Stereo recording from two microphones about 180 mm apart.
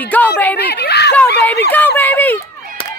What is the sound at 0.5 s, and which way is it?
Speech, 65° left (ahead or behind).